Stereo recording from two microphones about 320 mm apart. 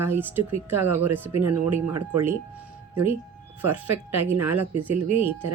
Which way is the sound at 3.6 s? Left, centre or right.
Centre.